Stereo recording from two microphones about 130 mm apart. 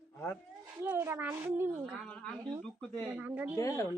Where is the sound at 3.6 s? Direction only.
25° left (ahead or behind).